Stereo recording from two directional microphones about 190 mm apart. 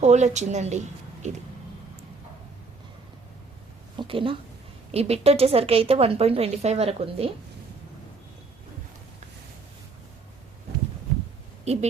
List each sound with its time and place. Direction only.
0.0 s a woman's voice: 35° right (ahead or behind)
3.9 s a woman's voice: 25° right (ahead or behind)
11.6 s speech: 35° right (ahead or behind)